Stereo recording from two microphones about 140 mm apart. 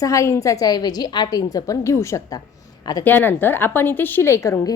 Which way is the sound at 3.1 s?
15° left (ahead or behind).